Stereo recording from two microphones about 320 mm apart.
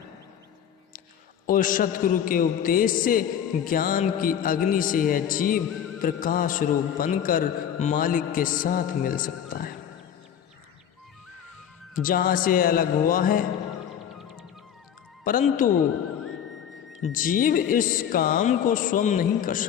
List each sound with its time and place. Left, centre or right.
1.5 s a man's voice: left
11.9 s a man's voice: left
15.2 s a man's voice: left
17.1 s a man's voice: left